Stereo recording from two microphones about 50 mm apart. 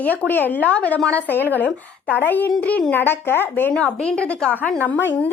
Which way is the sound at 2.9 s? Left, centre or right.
Left.